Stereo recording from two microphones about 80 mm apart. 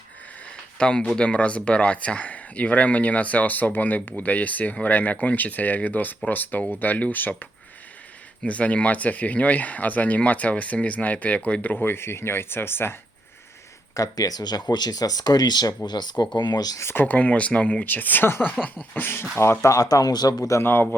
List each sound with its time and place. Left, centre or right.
0.8 s speech: centre
8.4 s speech: centre
13.9 s speech: left
16.8 s speech: left
19.4 s speech: left
20.6 s speech: left